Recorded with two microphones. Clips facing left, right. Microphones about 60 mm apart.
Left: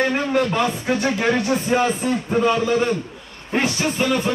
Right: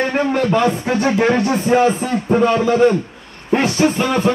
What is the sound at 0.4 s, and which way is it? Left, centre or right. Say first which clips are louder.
Speech: right 4 dB; right.